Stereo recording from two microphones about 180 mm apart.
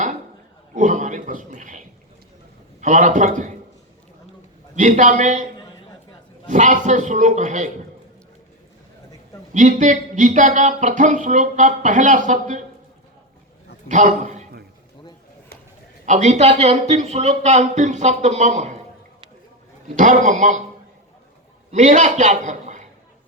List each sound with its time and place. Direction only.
0.7 s a man's voice: 45° right (ahead or behind)
2.8 s speech: 45° right (ahead or behind)
4.7 s a man's voice: 40° right (ahead or behind)
6.5 s a man's voice: 40° right (ahead or behind)
9.5 s speech: 45° right (ahead or behind)
13.8 s a man's voice: 45° right (ahead or behind)
16.0 s a man's voice: 40° right (ahead or behind)
20.0 s speech: 45° right (ahead or behind)
21.7 s speech: 45° right (ahead or behind)